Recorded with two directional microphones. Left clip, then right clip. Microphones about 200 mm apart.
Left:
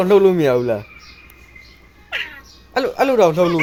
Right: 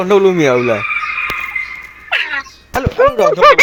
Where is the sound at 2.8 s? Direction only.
Centre (ahead or behind).